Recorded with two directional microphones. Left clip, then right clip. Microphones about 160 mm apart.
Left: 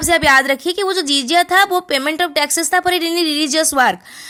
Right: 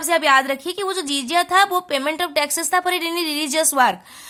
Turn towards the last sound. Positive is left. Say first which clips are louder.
# left 3 dB
turn(degrees=25)  # may be behind; listen again after turning